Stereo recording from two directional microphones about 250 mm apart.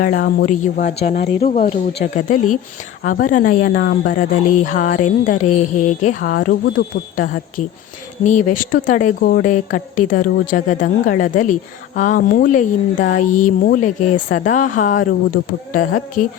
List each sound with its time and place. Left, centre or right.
0.0 s a woman's voice: left